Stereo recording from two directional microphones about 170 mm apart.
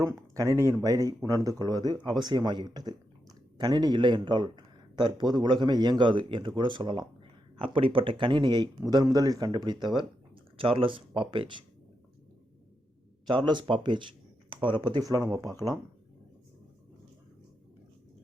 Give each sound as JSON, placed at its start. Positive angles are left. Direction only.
{"t": 0.0, "sound": "speech", "side_deg": -20}
{"t": 13.2, "sound": "speech", "side_deg": -25}